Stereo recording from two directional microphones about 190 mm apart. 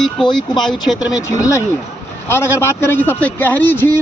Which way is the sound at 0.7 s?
Centre (ahead or behind).